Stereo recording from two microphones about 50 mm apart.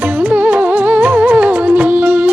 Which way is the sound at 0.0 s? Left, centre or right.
Right.